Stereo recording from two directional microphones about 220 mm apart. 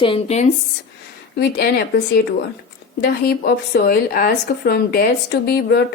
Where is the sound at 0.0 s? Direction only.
25° left (ahead or behind).